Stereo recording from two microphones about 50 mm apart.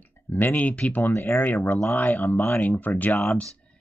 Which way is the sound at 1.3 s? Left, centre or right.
Left.